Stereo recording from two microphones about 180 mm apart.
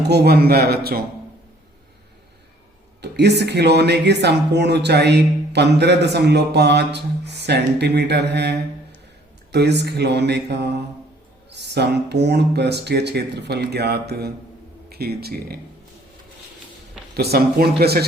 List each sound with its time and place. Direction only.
0.0 s a man's voice: 65° right (ahead or behind)
3.0 s a man's voice: 70° right (ahead or behind)
17.2 s a man's voice: 60° right (ahead or behind)